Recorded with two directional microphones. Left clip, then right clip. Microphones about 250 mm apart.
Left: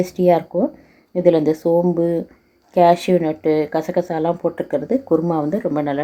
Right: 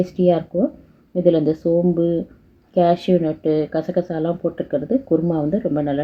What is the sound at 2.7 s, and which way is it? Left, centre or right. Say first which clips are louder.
A woman's voice: left 3 dB; centre.